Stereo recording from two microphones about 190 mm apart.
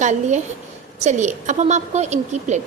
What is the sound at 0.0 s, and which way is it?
A woman's voice, 40° right (ahead or behind).